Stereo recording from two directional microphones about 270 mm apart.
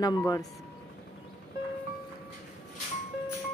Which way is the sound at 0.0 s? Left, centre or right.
Centre.